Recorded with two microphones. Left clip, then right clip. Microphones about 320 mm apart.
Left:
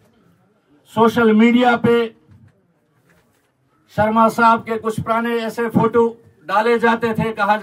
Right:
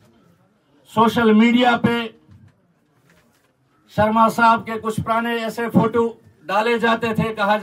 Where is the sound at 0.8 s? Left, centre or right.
Centre.